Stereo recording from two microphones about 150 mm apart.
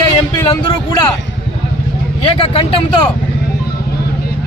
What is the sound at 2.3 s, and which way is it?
Speech, 35° left (ahead or behind).